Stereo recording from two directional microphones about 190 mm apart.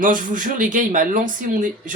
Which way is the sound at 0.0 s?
45° right (ahead or behind).